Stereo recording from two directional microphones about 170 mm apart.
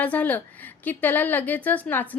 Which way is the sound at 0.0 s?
10° left (ahead or behind).